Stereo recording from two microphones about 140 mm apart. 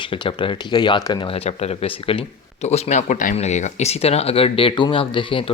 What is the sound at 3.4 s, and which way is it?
Speech, 55° left (ahead or behind).